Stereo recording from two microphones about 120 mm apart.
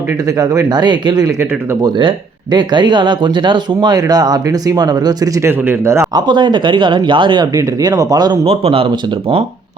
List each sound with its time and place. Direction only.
0.3 s speech: 25° right (ahead or behind)
0.7 s speech: 40° right (ahead or behind)
5.4 s speech: 20° right (ahead or behind)
6.1 s speech: 40° right (ahead or behind)
7.5 s speech: 30° right (ahead or behind)
8.4 s speech: 50° right (ahead or behind)